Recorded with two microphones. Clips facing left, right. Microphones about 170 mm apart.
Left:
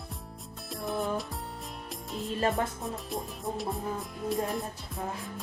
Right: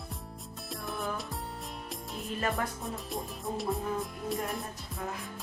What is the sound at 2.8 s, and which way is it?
Speech, centre (ahead or behind).